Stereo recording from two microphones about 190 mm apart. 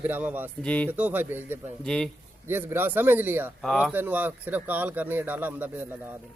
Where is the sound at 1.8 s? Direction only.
5° left (ahead or behind).